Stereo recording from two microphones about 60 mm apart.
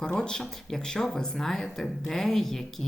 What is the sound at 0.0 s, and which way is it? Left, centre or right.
Speech, centre.